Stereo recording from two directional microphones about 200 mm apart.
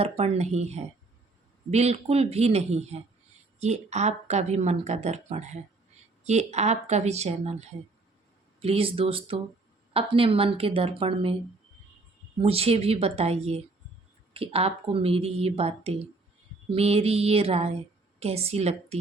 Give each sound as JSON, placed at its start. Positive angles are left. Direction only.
{"t": 0.0, "sound": "a woman's voice", "side_deg": -30}
{"t": 12.4, "sound": "a woman's voice", "side_deg": -30}